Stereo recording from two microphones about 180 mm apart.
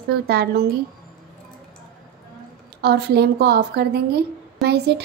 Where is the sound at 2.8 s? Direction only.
65° right (ahead or behind).